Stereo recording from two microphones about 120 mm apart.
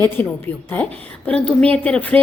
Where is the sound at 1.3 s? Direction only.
10° left (ahead or behind).